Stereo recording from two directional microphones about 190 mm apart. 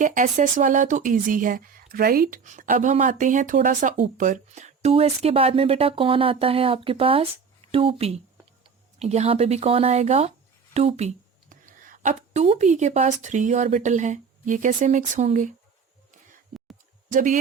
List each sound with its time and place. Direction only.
0.0 s a woman's voice: 45° right (ahead or behind)
17.1 s speech: 45° right (ahead or behind)